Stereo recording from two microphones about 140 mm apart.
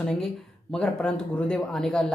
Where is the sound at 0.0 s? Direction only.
10° left (ahead or behind).